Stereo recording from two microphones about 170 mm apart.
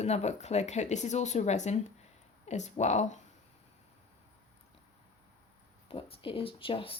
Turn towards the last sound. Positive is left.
turn(degrees=30)  # may be behind; listen again after turning